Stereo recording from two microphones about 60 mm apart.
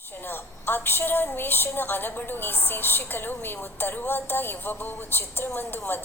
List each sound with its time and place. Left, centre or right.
0.3 s a woman's voice: left